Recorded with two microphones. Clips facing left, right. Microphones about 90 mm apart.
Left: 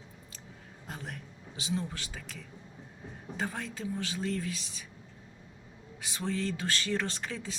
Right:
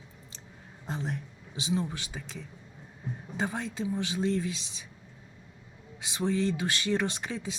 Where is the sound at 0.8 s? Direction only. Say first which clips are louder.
Right 7 dB; 25° right (ahead or behind).